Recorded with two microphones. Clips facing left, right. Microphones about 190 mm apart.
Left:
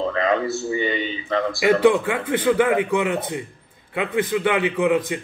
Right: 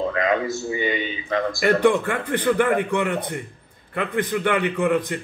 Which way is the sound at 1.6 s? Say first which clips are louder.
Left 2 dB; 10° left (ahead or behind).